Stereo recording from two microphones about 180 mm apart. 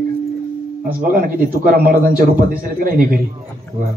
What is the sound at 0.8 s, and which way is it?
A man's voice, 50° right (ahead or behind).